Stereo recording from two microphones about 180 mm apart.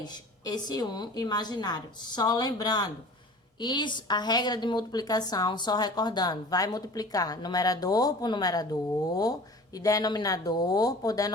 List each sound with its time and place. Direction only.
0.0 s a woman's voice: 25° left (ahead or behind)